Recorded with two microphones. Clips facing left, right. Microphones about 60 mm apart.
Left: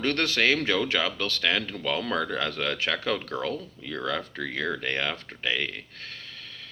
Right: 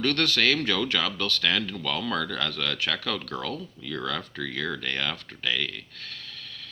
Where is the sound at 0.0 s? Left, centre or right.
Left.